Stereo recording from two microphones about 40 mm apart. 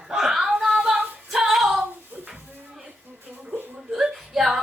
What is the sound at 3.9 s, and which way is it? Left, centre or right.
Whimper, centre.